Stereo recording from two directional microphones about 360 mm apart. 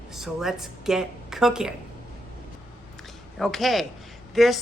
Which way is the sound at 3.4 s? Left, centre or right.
Centre.